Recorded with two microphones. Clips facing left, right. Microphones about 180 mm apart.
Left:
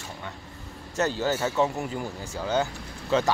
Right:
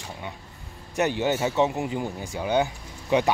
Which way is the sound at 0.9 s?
15° right (ahead or behind).